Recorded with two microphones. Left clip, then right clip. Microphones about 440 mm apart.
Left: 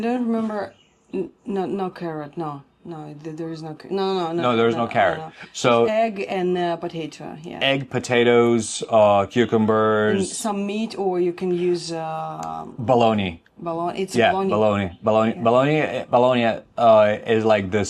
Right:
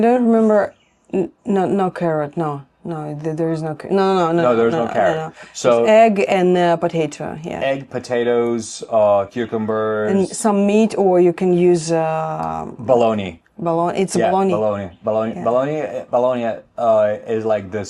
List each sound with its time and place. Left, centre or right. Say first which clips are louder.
0.0 s a woman's voice: right 10 dB; right
4.4 s speech: right 4 dB; centre
5.8 s a woman's voice: right 8 dB; right
7.6 s speech: even; centre
10.4 s a woman's voice: right 10 dB; right
12.8 s speech: right 2 dB; centre
13.7 s a woman's voice: right 7 dB; right
14.5 s speech: right 1 dB; centre